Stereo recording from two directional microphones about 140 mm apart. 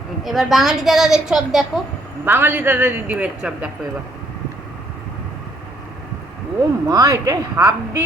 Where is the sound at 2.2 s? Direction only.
15° right (ahead or behind).